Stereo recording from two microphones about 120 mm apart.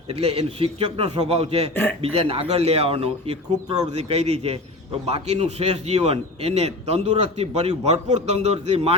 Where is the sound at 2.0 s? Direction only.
55° right (ahead or behind).